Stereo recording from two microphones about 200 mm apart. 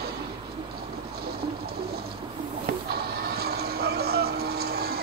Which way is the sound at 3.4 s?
50° right (ahead or behind).